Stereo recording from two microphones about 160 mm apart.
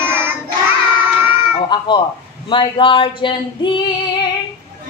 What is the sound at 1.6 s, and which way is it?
A woman's voice, 30° left (ahead or behind).